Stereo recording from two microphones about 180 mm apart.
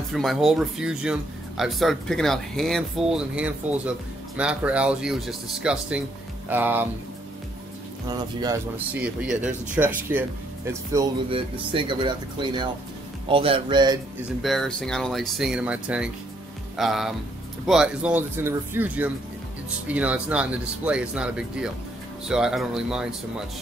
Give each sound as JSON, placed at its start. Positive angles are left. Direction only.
{"t": 0.1, "sound": "speech", "side_deg": 0}
{"t": 8.1, "sound": "speech", "side_deg": -20}
{"t": 8.7, "sound": "speech", "side_deg": -10}
{"t": 11.2, "sound": "speech", "side_deg": -30}
{"t": 14.4, "sound": "speech", "side_deg": 0}